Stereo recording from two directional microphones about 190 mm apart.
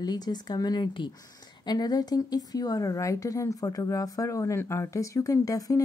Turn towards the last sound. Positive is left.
turn(degrees=20)  # may be behind; listen again after turning